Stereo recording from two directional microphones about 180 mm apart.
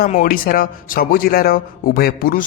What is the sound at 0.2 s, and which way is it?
Speech, 55° left (ahead or behind).